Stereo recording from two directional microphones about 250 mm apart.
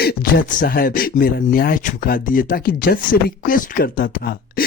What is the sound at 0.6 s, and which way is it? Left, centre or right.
Speech, left.